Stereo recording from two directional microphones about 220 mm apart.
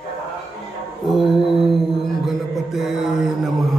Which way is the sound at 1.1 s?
Centre (ahead or behind).